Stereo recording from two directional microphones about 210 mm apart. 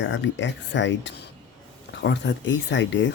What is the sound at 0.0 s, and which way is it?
Speech, 60° left (ahead or behind).